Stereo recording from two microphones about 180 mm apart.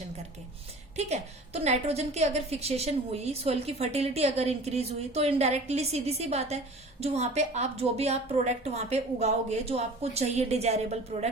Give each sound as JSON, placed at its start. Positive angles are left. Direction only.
{"t": 0.9, "sound": "a woman's voice", "side_deg": -35}